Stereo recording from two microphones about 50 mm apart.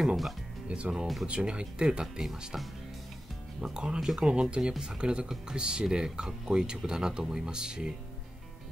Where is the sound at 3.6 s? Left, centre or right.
Centre.